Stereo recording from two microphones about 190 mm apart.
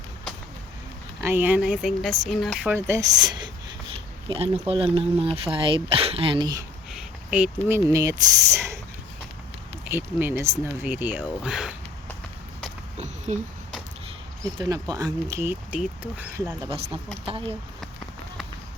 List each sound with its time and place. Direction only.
1.2 s speech: 10° right (ahead or behind)
2.7 s speech: 15° right (ahead or behind)
6.9 s a sound: 5° right (ahead or behind)
7.7 s speech: 15° right (ahead or behind)
9.9 s speech: 10° right (ahead or behind)
13.0 s a sound: 35° right (ahead or behind)
14.6 s speech: 20° right (ahead or behind)
16.6 s speech: 30° right (ahead or behind)